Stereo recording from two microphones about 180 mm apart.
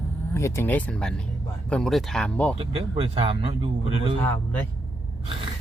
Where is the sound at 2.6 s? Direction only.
35° right (ahead or behind).